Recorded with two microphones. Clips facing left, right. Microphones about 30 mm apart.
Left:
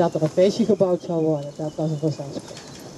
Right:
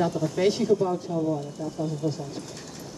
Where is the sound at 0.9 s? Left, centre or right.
Left.